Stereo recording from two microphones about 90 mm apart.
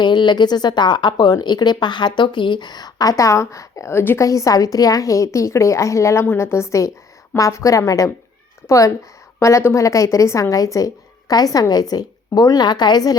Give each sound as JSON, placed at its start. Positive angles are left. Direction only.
{"t": 0.0, "sound": "speech", "side_deg": 55}
{"t": 4.3, "sound": "a woman's voice", "side_deg": 40}